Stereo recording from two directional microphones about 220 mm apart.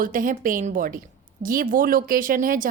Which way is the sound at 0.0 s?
40° right (ahead or behind).